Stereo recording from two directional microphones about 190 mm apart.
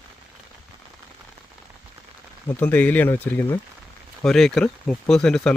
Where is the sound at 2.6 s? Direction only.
10° left (ahead or behind).